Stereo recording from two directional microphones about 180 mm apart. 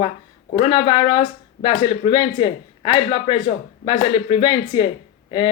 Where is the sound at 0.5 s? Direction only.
30° left (ahead or behind).